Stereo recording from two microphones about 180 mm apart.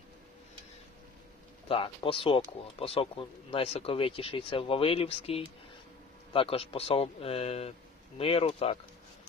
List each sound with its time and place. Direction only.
1.6 s speech: 30° left (ahead or behind)